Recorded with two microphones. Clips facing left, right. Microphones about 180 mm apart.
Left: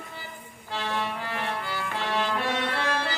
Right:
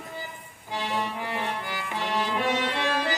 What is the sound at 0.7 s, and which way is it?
Music, 15° right (ahead or behind).